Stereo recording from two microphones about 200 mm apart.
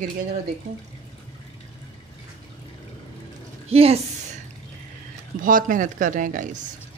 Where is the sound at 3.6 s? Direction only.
30° right (ahead or behind).